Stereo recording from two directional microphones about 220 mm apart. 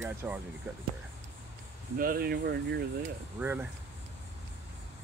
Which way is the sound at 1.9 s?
40° right (ahead or behind).